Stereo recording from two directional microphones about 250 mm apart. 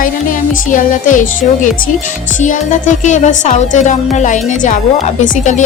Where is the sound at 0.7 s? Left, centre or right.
Left.